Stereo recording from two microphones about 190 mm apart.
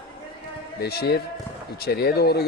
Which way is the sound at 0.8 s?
55° left (ahead or behind).